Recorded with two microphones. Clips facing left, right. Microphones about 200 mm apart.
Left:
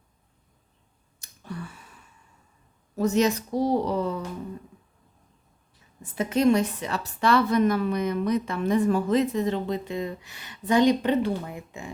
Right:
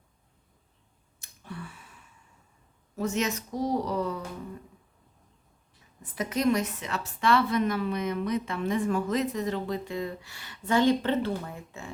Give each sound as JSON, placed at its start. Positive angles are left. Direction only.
{"t": 1.2, "sound": "a sound", "side_deg": 40}
{"t": 2.9, "sound": "a woman's voice", "side_deg": 40}
{"t": 6.0, "sound": "a woman's voice", "side_deg": 25}